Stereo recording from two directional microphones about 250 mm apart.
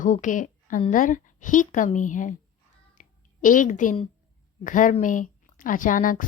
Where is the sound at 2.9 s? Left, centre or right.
Left.